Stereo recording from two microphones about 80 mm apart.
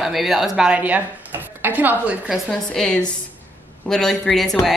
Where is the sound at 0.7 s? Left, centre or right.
Centre.